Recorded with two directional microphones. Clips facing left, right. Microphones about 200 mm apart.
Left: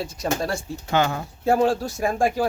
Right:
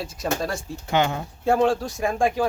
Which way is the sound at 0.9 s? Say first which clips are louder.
Even; 20° right (ahead or behind).